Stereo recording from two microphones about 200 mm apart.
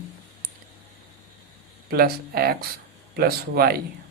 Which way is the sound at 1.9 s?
50° right (ahead or behind).